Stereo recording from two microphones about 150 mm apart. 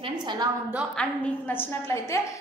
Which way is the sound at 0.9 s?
10° left (ahead or behind).